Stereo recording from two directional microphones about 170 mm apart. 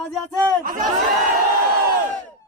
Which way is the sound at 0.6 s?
50° right (ahead or behind).